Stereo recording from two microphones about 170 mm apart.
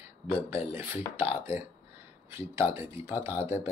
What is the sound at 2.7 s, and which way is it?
Speech, 15° right (ahead or behind).